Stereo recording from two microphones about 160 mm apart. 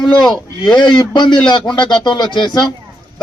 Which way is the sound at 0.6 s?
30° left (ahead or behind).